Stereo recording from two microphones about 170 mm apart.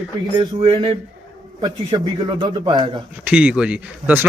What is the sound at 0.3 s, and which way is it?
A man's voice, 30° right (ahead or behind).